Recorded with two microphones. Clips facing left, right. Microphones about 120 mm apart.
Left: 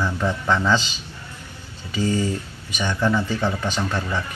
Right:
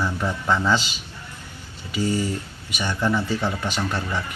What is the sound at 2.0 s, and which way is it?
Speech, 15° left (ahead or behind).